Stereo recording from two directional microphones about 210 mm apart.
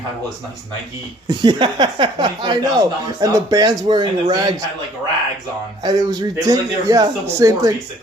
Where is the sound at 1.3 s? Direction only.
20° right (ahead or behind).